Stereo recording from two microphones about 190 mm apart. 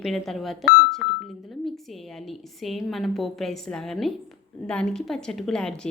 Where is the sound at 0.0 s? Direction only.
Centre (ahead or behind).